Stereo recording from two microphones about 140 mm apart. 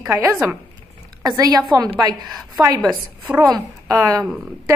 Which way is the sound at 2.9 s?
10° right (ahead or behind).